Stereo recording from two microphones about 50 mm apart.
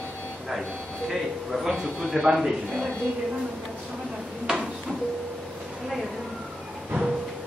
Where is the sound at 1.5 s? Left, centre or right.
Centre.